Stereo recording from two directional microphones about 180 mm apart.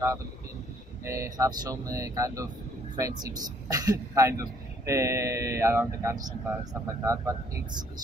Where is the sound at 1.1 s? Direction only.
20° right (ahead or behind).